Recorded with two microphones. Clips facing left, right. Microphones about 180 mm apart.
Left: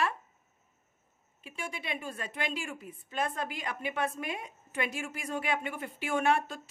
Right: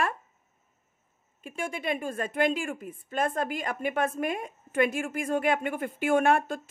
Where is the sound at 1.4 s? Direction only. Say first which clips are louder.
Right 8 dB; 50° right (ahead or behind).